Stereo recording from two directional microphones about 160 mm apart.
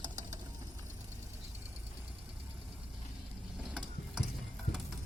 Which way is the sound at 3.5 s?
5° right (ahead or behind).